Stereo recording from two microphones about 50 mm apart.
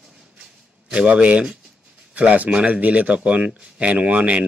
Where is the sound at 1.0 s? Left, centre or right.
Right.